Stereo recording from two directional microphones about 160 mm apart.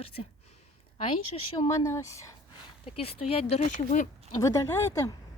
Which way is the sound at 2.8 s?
35° left (ahead or behind).